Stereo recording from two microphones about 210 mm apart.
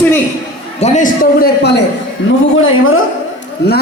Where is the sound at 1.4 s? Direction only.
50° left (ahead or behind).